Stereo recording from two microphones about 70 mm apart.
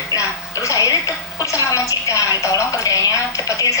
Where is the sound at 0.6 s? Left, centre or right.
Left.